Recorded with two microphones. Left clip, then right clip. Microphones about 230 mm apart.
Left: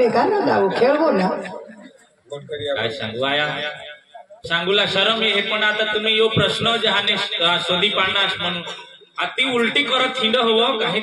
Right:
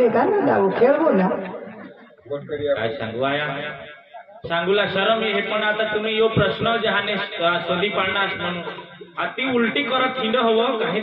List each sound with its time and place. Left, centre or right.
0.1 s a man's voice: left
2.7 s a man's voice: left